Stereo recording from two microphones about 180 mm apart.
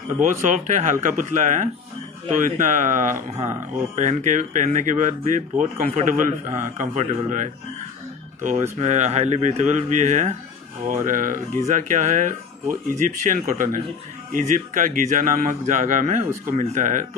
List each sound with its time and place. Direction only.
0.2 s speech: 45° right (ahead or behind)
8.7 s speech: 40° right (ahead or behind)